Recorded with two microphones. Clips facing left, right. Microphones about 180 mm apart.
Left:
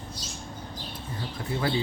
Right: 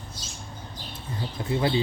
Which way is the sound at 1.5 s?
20° right (ahead or behind).